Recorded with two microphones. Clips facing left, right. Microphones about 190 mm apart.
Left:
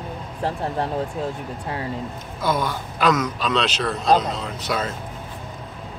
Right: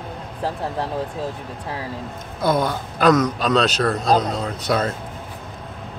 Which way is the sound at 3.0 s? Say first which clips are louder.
Right 4 dB; 35° right (ahead or behind).